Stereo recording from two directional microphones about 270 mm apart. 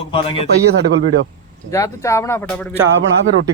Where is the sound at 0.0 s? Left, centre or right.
Centre.